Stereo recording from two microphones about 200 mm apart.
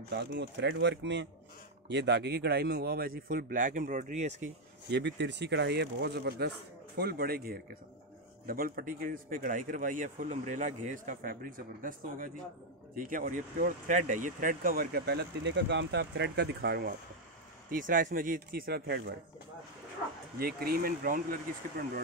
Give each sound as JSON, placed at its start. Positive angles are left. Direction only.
{"t": 0.1, "sound": "speech", "side_deg": -60}
{"t": 4.9, "sound": "speech", "side_deg": -60}
{"t": 17.6, "sound": "speech", "side_deg": -40}
{"t": 20.3, "sound": "speech", "side_deg": -50}